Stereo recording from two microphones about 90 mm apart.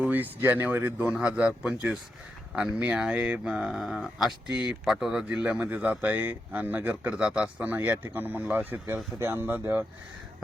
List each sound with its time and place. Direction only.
0.1 s speech: 20° right (ahead or behind)